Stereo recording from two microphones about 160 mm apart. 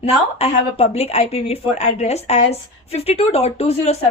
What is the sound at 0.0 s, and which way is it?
A woman's voice, 40° left (ahead or behind).